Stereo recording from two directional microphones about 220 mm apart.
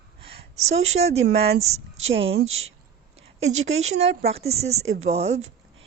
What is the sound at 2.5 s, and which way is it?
Speech, 65° right (ahead or behind).